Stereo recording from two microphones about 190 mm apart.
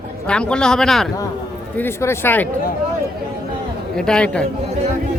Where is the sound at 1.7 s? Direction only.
10° left (ahead or behind).